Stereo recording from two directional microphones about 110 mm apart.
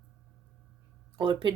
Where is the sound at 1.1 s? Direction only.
45° right (ahead or behind).